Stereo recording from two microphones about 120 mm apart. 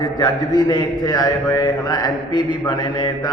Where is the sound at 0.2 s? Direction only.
35° left (ahead or behind).